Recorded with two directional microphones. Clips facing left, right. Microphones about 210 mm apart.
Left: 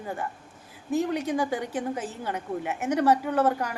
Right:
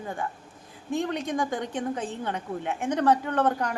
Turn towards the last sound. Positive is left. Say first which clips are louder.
# left 1 dB
turn(degrees=5)  # may be behind; listen again after turning